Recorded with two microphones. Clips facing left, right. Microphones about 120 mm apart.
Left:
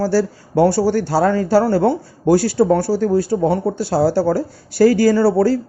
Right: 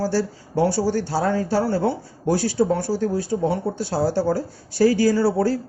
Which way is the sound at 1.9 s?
75° left (ahead or behind).